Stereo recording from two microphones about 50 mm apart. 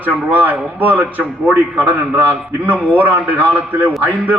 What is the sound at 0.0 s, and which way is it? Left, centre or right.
A man's voice, right.